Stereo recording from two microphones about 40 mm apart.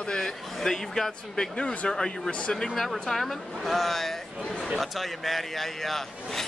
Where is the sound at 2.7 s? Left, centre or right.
Centre.